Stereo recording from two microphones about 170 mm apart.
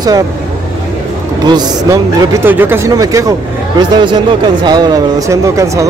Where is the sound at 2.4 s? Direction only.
10° right (ahead or behind).